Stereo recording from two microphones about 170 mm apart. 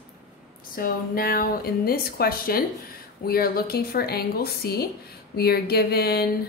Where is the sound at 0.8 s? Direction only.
60° left (ahead or behind).